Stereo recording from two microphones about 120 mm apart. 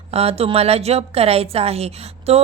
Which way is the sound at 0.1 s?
60° right (ahead or behind).